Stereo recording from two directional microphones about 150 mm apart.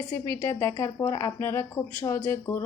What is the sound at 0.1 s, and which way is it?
A woman's voice, 20° left (ahead or behind).